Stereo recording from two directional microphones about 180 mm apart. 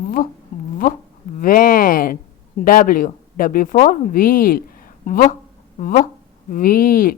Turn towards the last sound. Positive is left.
turn(degrees=50)  # may be behind; listen again after turning